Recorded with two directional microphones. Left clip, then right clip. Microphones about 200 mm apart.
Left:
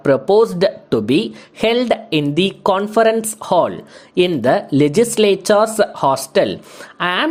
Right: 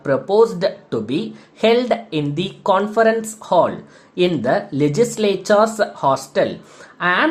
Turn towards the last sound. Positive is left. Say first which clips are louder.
# right 1 dB
turn(degrees=45)  # may be behind; listen again after turning